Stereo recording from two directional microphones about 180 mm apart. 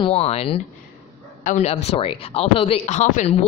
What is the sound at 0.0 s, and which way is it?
Speech, 35° left (ahead or behind).